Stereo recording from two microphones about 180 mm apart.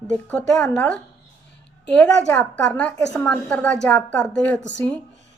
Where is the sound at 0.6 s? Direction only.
5° left (ahead or behind).